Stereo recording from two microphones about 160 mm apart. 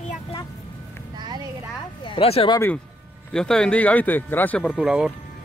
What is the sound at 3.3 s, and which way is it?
Speech, 5° left (ahead or behind).